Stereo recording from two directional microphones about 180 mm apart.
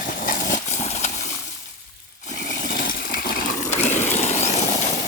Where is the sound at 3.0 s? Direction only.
50° left (ahead or behind).